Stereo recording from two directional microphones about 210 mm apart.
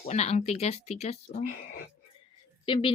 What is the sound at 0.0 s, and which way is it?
Speech, 30° left (ahead or behind).